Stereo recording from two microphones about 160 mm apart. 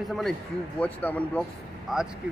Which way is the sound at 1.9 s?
Centre (ahead or behind).